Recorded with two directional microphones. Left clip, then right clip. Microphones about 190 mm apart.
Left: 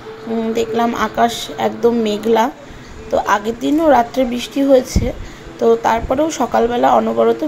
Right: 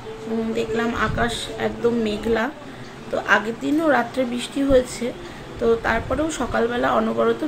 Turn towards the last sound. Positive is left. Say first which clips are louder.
# left 7 dB
turn(degrees=20)  # may be behind; listen again after turning